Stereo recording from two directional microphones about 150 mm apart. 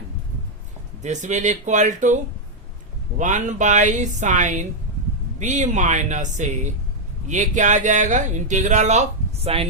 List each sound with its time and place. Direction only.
1.0 s speech: 50° right (ahead or behind)
3.2 s speech: 55° right (ahead or behind)